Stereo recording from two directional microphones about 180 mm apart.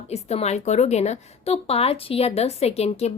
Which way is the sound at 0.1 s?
35° left (ahead or behind).